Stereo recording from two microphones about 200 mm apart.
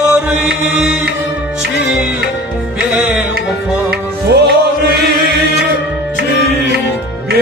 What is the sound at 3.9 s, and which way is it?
Music, 55° right (ahead or behind).